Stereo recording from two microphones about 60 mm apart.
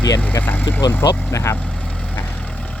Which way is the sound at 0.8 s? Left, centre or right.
Left.